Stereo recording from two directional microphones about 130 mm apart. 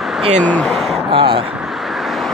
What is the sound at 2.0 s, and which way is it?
Vehicle, centre (ahead or behind).